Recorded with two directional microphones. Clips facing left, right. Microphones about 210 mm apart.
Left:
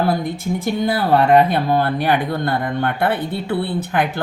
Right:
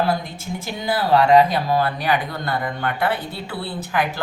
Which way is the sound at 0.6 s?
60° left (ahead or behind).